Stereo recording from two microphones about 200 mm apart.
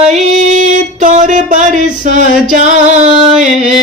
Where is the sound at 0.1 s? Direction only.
40° right (ahead or behind).